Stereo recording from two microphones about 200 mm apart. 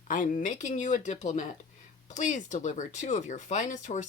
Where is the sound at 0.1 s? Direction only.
40° left (ahead or behind).